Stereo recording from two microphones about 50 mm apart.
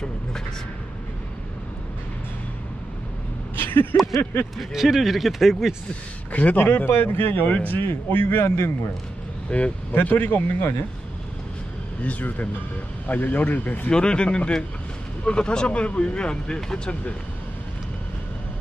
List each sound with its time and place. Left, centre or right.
3.6 s vehicle: left
4.5 s speech: centre
6.3 s speech: left
6.6 s speech: left
8.2 s speech: left
8.5 s a man's voice: left
9.5 s speech: left
9.9 s speech: left
12.0 s speech: left
13.9 s speech: centre